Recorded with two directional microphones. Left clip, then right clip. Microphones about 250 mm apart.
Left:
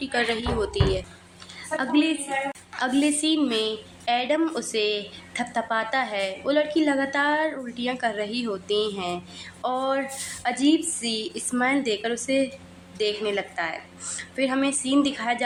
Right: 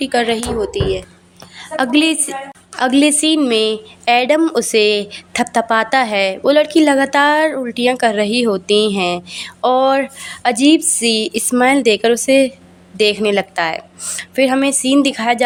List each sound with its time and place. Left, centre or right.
0.0 s speech: right
1.7 s a woman's voice: right